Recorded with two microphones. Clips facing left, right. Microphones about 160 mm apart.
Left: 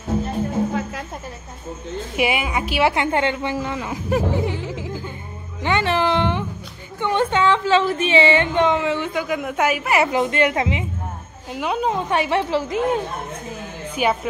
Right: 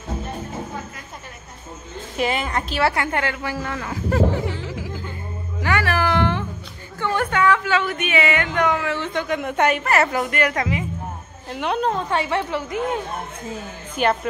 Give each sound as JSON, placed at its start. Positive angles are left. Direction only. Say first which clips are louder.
{"t": 2.1, "sound": "a woman's voice", "louder": "left 1 dB", "side_deg": 10}
{"t": 5.6, "sound": "a sound", "louder": "left 2 dB", "side_deg": 20}
{"t": 7.0, "sound": "a woman's voice", "louder": "left 2 dB", "side_deg": 20}
{"t": 9.1, "sound": "a woman's voice", "louder": "even", "side_deg": 5}
{"t": 10.2, "sound": "a woman's voice", "louder": "left 3 dB", "side_deg": 25}
{"t": 11.5, "sound": "a woman's voice", "louder": "even", "side_deg": 5}
{"t": 12.1, "sound": "a woman's voice", "louder": "left 3 dB", "side_deg": 20}
{"t": 14.0, "sound": "a woman's voice", "louder": "even", "side_deg": 10}